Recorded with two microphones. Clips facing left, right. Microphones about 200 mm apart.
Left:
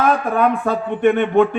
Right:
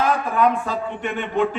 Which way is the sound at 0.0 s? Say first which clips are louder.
Left 3 dB; 55° left (ahead or behind).